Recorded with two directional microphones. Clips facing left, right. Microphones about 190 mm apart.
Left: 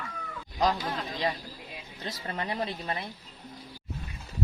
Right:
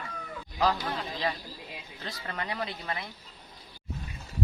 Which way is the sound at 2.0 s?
20° left (ahead or behind).